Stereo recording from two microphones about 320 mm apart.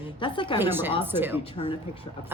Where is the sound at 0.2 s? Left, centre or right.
Centre.